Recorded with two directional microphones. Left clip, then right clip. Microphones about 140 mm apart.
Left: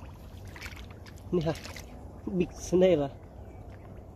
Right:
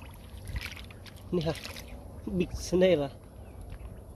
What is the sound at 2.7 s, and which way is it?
Speech, centre (ahead or behind).